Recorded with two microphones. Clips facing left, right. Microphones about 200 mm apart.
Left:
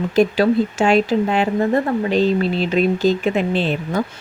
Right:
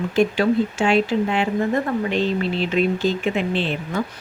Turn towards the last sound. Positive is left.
turn(degrees=40)  # may be behind; listen again after turning